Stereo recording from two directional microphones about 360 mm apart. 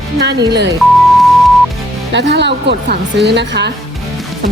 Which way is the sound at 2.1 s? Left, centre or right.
Right.